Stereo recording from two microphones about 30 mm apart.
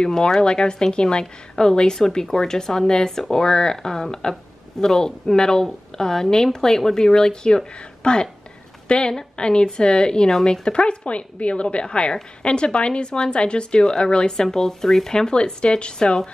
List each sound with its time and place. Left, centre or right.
0.3 s a woman's voice: left
11.8 s a woman's voice: left
14.4 s speech: centre
15.3 s a woman's voice: left